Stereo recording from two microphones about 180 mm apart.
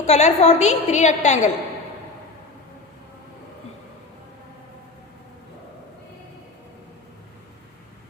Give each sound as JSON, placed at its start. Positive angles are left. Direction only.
{"t": 0.0, "sound": "a woman's voice", "side_deg": 40}